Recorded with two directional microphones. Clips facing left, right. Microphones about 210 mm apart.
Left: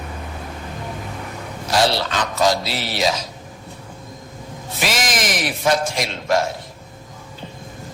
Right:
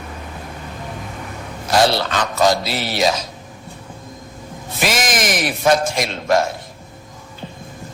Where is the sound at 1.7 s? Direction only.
50° right (ahead or behind).